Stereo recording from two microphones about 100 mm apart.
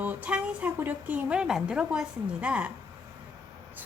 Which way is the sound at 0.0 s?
15° right (ahead or behind).